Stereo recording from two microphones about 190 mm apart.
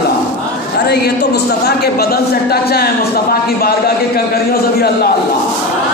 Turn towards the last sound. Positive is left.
turn(degrees=55)  # may be behind; listen again after turning